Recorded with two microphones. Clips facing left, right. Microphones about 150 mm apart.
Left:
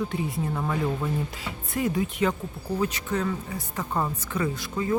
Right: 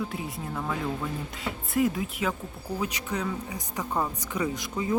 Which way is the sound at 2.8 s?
15° right (ahead or behind).